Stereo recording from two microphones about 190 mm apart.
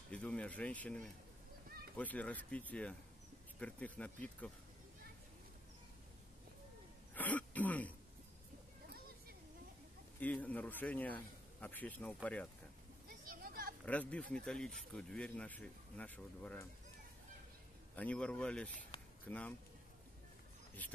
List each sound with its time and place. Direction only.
0.1 s a man's voice: 5° left (ahead or behind)
7.2 s throat clearing: 10° left (ahead or behind)
10.2 s a man's voice: 10° left (ahead or behind)
13.3 s a sound: 50° right (ahead or behind)
13.8 s a man's voice: 5° left (ahead or behind)
17.9 s speech: 5° left (ahead or behind)